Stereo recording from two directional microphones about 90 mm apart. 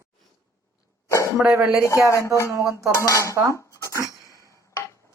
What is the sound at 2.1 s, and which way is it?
Cutlery, 30° left (ahead or behind).